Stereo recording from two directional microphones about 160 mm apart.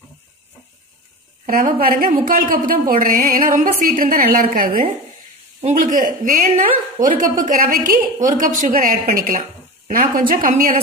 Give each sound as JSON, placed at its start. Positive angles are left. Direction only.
{"t": 1.4, "sound": "a woman's voice", "side_deg": -60}
{"t": 5.6, "sound": "a woman's voice", "side_deg": -50}